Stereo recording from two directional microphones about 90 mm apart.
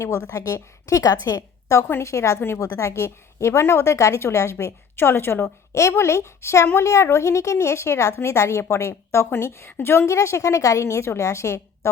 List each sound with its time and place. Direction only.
0.3 s a woman's voice: 35° left (ahead or behind)